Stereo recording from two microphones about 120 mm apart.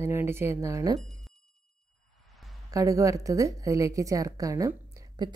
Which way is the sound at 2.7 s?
25° right (ahead or behind).